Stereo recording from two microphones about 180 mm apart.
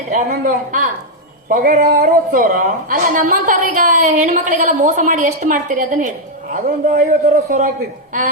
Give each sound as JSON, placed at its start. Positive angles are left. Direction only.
{"t": 0.3, "sound": "a woman's voice", "side_deg": -45}